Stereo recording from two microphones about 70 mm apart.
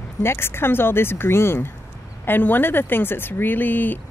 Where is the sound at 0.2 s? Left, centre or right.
Left.